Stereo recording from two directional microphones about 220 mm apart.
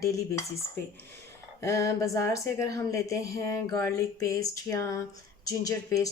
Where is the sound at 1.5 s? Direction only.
15° left (ahead or behind).